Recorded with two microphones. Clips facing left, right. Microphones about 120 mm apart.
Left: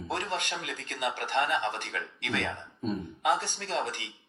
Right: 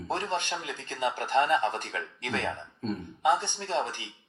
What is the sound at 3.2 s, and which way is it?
Speech, 25° right (ahead or behind).